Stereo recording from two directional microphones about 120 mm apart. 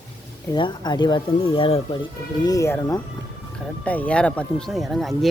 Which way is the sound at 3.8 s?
10° left (ahead or behind).